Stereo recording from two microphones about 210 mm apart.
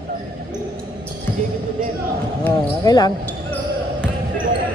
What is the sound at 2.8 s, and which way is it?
Speech, 20° left (ahead or behind).